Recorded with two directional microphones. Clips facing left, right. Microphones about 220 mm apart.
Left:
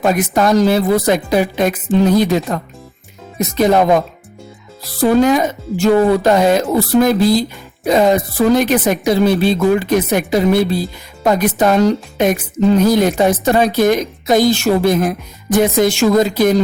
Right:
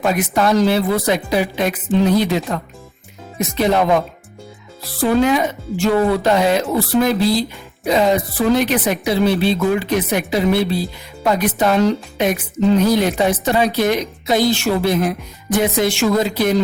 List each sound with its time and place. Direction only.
0.0 s speech: 45° left (ahead or behind)